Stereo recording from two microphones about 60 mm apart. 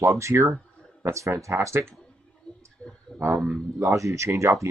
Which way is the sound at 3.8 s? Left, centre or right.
Right.